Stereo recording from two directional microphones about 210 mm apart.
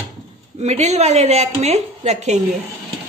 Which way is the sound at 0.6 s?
30° right (ahead or behind).